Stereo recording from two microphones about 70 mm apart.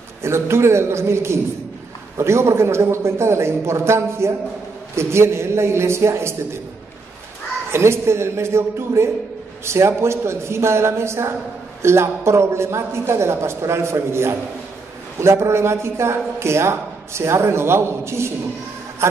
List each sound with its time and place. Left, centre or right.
0.2 s a woman's voice: right
7.7 s a woman's voice: right